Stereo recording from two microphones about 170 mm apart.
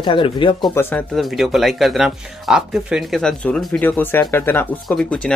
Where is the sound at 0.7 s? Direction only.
15° left (ahead or behind).